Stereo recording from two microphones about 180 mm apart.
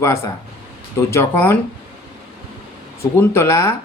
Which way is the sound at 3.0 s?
15° left (ahead or behind).